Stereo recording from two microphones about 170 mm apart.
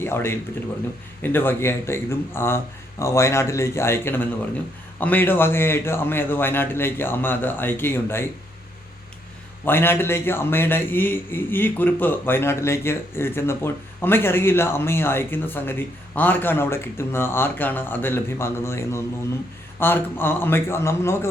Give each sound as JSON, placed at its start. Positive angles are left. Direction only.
{"t": 0.0, "sound": "a man's voice", "side_deg": 15}
{"t": 9.6, "sound": "a man's voice", "side_deg": 15}